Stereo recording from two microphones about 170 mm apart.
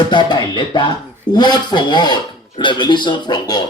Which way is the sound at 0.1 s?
25° left (ahead or behind).